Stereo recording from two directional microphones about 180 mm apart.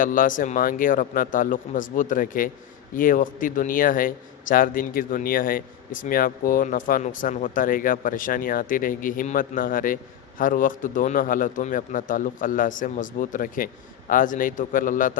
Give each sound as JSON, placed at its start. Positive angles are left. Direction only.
{"t": 0.0, "sound": "a man's voice", "side_deg": 50}